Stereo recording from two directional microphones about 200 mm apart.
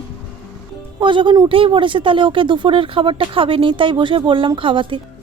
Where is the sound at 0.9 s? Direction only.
25° right (ahead or behind).